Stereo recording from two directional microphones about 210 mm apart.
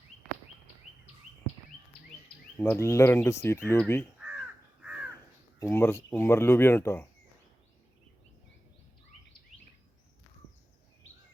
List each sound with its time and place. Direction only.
2.6 s speech: 10° left (ahead or behind)
5.5 s speech: 15° left (ahead or behind)